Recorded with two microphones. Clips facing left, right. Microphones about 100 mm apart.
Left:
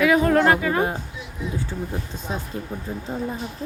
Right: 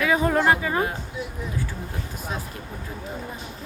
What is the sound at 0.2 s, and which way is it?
Speech, 10° right (ahead or behind).